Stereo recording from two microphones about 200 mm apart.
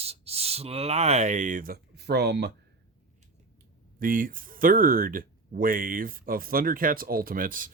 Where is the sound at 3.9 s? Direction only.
45° right (ahead or behind).